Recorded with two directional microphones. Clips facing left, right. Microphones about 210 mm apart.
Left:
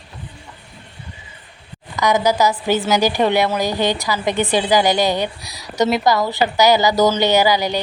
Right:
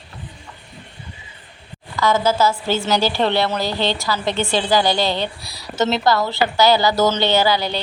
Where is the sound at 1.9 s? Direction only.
15° left (ahead or behind).